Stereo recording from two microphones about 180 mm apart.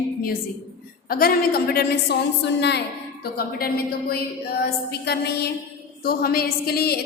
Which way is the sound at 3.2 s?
60° left (ahead or behind).